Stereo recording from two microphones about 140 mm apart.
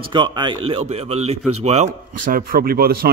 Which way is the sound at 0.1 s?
30° right (ahead or behind).